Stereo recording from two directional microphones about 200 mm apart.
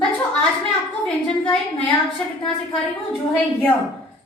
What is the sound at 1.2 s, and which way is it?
Speech, 5° left (ahead or behind).